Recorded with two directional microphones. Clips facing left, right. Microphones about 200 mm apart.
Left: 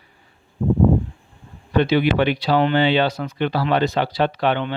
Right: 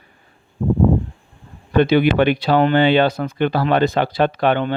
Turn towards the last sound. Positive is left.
turn(degrees=-50)  # may be behind; listen again after turning